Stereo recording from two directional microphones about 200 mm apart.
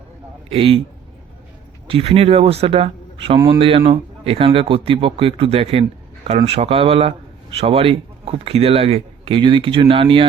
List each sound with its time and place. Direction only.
0.5 s speech: 30° right (ahead or behind)
1.9 s speech: 30° right (ahead or behind)